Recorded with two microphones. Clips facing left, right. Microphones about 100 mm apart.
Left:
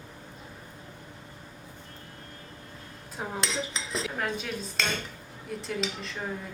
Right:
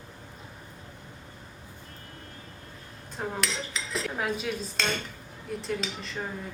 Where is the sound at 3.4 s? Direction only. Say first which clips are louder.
Left 1 dB; 25° left (ahead or behind).